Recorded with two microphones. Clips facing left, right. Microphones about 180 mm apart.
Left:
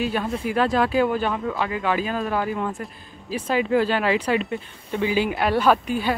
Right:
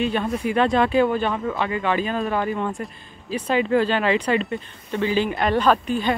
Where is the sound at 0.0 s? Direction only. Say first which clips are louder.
Right 2 dB; 5° left (ahead or behind).